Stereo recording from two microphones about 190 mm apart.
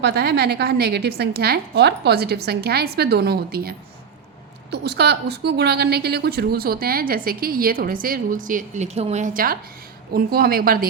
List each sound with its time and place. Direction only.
0.0 s a woman's voice: 60° right (ahead or behind)